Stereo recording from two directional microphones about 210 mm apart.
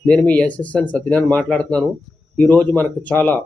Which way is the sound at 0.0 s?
5° left (ahead or behind).